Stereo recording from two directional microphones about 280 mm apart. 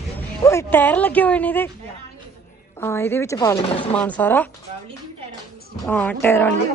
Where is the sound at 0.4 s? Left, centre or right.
Centre.